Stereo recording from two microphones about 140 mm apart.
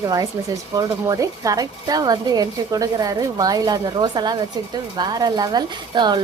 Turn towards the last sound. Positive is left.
turn(degrees=-30)  # may be behind; listen again after turning